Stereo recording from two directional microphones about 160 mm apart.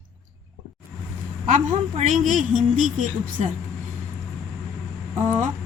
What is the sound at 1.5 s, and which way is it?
Speech, 50° right (ahead or behind).